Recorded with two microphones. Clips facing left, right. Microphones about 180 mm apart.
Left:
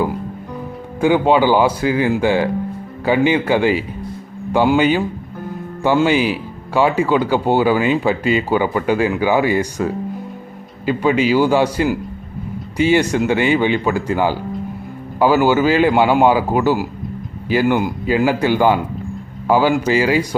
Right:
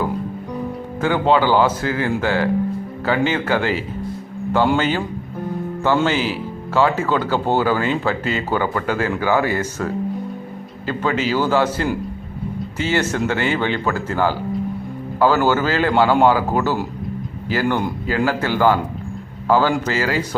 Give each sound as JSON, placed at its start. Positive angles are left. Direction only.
{"t": 1.0, "sound": "speech", "side_deg": 15}
{"t": 6.1, "sound": "speech", "side_deg": 15}